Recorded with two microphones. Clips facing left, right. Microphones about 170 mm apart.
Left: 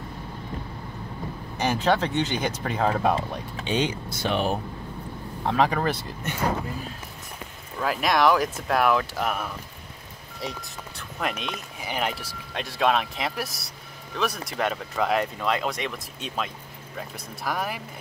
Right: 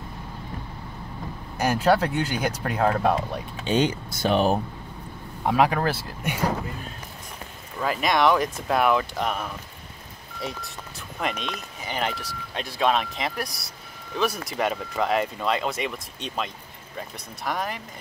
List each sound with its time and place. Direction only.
1.6 s speech: 10° right (ahead or behind)
3.6 s speech: 45° right (ahead or behind)
5.4 s speech: 10° right (ahead or behind)
7.8 s speech: centre (ahead or behind)
11.1 s speech: centre (ahead or behind)
17.5 s speech: 5° left (ahead or behind)